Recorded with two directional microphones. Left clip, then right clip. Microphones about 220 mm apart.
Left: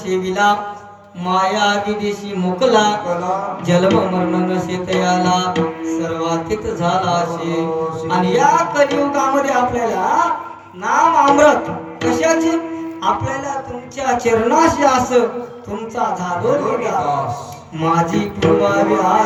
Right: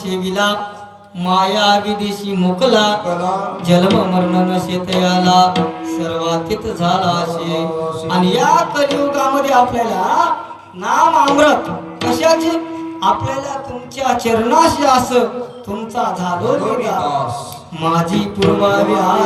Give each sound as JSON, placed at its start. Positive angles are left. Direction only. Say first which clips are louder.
{"t": 0.1, "sound": "mantra", "louder": "left 2 dB", "side_deg": -20}